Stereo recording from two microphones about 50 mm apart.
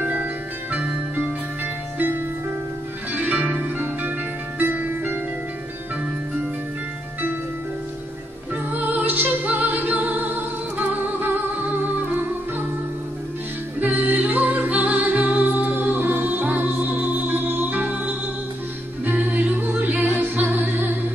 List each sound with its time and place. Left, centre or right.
0.7 s music: right
2.0 s music: right
8.7 s music: right
13.7 s music: right